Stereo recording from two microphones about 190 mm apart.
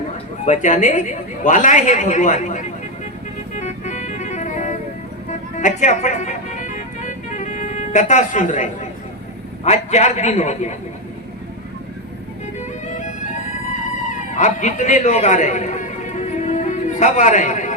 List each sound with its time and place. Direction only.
0.4 s a man's voice: 40° left (ahead or behind)
3.6 s music: 40° left (ahead or behind)
9.6 s a man's voice: 35° left (ahead or behind)
12.9 s music: 40° left (ahead or behind)
14.3 s music: 40° left (ahead or behind)